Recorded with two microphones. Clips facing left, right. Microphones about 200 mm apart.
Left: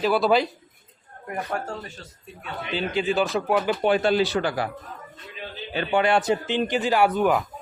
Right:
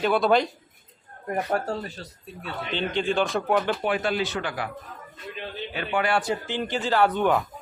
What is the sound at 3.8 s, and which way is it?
Speech, 30° left (ahead or behind).